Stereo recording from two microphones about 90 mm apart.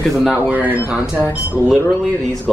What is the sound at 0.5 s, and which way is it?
Speech, 15° right (ahead or behind).